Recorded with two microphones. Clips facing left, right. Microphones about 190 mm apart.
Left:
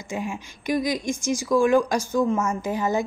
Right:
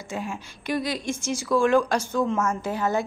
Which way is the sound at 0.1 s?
10° left (ahead or behind).